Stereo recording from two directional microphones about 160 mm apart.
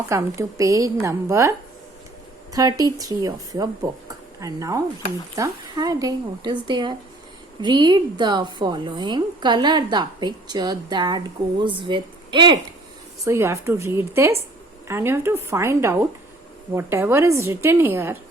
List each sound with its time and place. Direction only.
0.1 s a woman's voice: 20° right (ahead or behind)
13.2 s a woman's voice: 15° right (ahead or behind)